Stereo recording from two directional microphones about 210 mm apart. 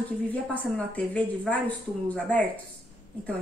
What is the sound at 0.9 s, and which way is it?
A woman's voice, 5° left (ahead or behind).